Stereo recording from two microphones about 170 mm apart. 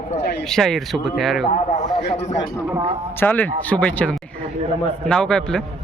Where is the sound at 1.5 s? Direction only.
40° left (ahead or behind).